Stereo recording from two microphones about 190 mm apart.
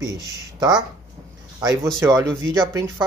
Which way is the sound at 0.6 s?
20° right (ahead or behind).